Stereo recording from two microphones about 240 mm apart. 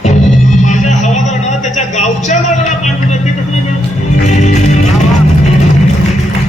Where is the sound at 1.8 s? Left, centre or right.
Left.